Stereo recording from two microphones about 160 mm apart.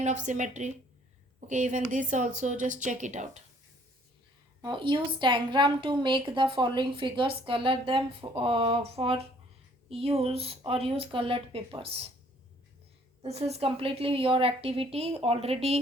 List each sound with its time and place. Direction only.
0.0 s speech: 50° right (ahead or behind)
4.6 s a woman's voice: 30° right (ahead or behind)
13.2 s a woman's voice: 40° right (ahead or behind)